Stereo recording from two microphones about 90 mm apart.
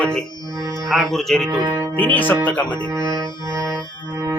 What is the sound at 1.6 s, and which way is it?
Music, 40° right (ahead or behind).